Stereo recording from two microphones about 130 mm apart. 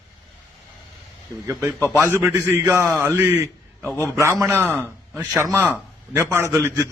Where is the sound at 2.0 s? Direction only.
15° right (ahead or behind).